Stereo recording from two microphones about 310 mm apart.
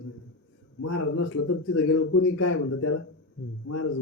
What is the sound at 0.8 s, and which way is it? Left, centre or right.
Speech, left.